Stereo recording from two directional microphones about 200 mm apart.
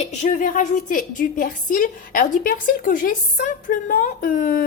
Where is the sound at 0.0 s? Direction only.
40° left (ahead or behind).